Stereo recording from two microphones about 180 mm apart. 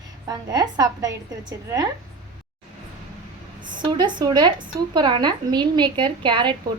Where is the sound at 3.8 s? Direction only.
25° right (ahead or behind).